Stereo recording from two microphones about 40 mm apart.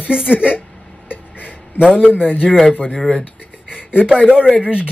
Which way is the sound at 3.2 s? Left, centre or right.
Left.